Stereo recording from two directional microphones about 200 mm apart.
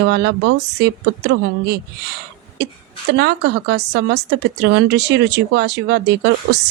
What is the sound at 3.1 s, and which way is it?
Speech, 55° right (ahead or behind).